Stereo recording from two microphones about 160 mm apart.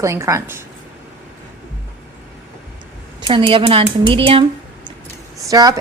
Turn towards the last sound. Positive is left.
turn(degrees=-20)  # may be behind; listen again after turning